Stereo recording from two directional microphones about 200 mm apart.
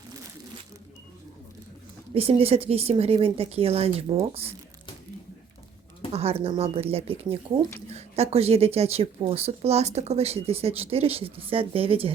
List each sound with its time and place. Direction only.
2.1 s speech: 30° right (ahead or behind)
6.1 s speech: 30° right (ahead or behind)